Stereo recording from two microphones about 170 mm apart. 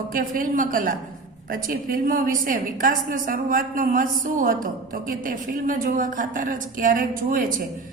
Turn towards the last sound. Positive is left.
turn(degrees=-55)  # may be behind; listen again after turning